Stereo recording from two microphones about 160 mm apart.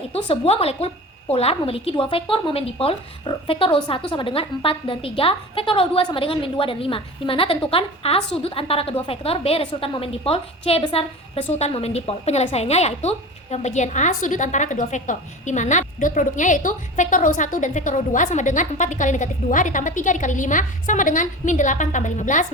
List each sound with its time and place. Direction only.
0.1 s a woman's voice: 40° left (ahead or behind)